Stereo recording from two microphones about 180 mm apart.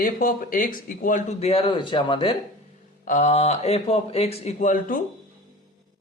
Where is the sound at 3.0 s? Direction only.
40° left (ahead or behind).